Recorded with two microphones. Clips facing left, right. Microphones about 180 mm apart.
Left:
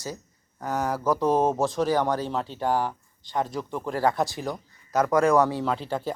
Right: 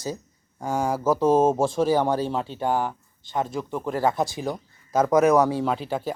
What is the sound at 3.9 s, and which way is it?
Speech, 20° right (ahead or behind).